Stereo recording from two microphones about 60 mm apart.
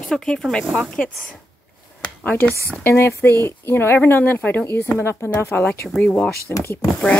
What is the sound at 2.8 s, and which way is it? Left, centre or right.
Speech, left.